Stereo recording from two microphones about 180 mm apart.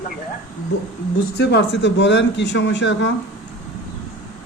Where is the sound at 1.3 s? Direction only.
70° left (ahead or behind); by 3.1 s 85° left.